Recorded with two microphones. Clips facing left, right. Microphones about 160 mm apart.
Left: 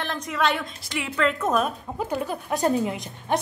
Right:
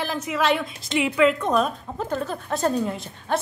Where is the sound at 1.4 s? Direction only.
5° left (ahead or behind).